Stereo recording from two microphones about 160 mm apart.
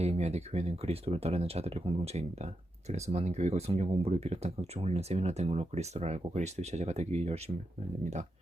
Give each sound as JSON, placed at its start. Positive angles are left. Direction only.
{"t": 0.0, "sound": "speech", "side_deg": -40}